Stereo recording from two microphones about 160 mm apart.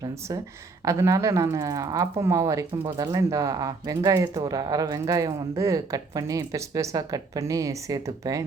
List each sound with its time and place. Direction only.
0.0 s speech: 20° right (ahead or behind)